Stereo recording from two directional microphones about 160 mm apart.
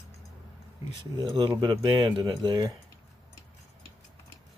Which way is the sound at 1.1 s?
25° right (ahead or behind).